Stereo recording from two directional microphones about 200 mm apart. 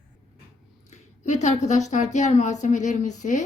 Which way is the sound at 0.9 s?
35° left (ahead or behind).